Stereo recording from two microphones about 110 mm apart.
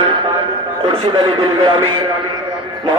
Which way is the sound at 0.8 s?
45° right (ahead or behind).